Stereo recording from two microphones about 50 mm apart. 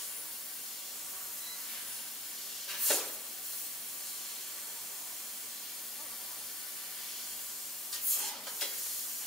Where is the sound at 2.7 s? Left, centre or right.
Centre.